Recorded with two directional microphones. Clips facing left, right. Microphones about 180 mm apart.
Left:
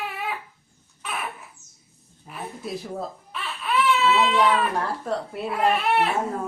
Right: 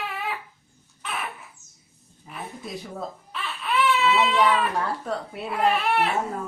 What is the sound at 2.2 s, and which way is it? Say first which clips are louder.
Speech: left 2 dB; centre (ahead or behind).